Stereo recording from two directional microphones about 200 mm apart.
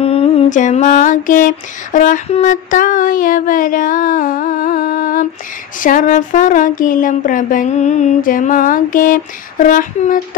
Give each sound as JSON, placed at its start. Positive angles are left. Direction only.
{"t": 0.0, "sound": "mantra", "side_deg": 30}